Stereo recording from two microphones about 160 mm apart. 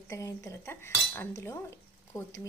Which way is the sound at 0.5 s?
15° left (ahead or behind).